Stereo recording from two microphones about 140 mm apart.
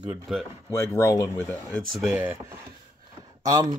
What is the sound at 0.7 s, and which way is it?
Speech, 20° left (ahead or behind).